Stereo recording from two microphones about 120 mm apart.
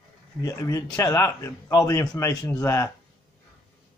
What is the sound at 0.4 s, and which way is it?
Speech, 25° left (ahead or behind).